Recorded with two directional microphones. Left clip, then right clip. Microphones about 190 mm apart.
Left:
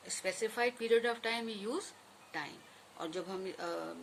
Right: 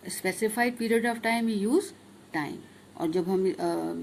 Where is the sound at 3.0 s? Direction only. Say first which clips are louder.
Right 13 dB; 30° right (ahead or behind).